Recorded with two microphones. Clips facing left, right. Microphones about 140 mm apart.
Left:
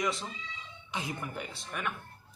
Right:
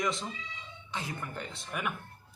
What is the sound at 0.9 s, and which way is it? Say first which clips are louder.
Speech: left 1 dB; 15° left (ahead or behind).